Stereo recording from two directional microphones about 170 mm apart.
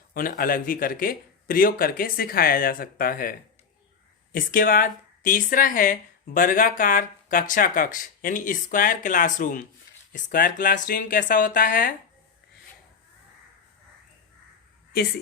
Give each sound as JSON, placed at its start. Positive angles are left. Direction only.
{"t": 0.1, "sound": "speech", "side_deg": 55}